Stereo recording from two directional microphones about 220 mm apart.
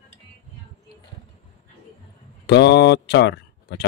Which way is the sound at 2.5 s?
50° left (ahead or behind).